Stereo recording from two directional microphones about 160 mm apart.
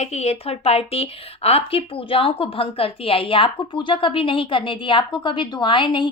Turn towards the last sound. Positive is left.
turn(degrees=30)  # may be behind; listen again after turning